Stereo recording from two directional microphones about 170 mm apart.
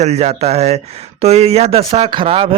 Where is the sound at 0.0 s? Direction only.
40° right (ahead or behind).